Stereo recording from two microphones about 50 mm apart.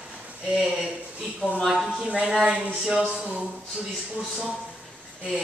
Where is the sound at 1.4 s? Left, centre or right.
Right.